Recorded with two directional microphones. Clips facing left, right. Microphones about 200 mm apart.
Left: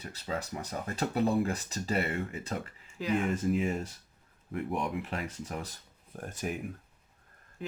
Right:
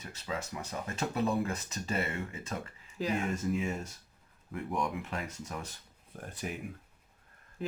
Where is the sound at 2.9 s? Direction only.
35° right (ahead or behind).